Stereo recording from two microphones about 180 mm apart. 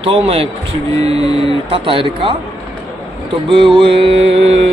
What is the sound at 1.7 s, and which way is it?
Speech, 30° right (ahead or behind).